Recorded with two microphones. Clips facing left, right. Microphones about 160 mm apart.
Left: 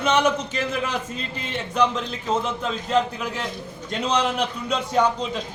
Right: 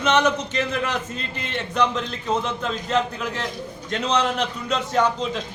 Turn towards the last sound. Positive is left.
turn(degrees=5)  # may be behind; listen again after turning